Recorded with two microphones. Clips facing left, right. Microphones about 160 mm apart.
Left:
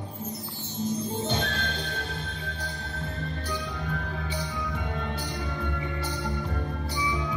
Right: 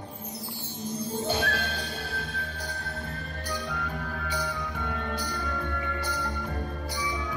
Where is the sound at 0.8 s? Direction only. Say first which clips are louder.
Left 3 dB; 10° right (ahead or behind).